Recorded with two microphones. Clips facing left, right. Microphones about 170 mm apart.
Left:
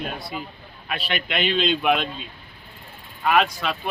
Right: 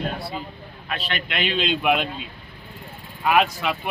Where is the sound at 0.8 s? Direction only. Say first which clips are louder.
Left 1 dB; 5° left (ahead or behind).